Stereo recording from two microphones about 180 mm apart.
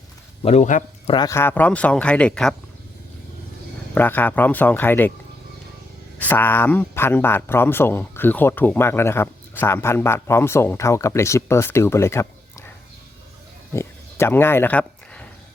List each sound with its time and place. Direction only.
0.4 s speech: 40° left (ahead or behind)
1.0 s speech: 25° left (ahead or behind)
1.3 s speech: 10° left (ahead or behind)
3.9 s speech: 10° left (ahead or behind)
6.1 s speech: 10° left (ahead or behind)
13.7 s a sound: 15° left (ahead or behind)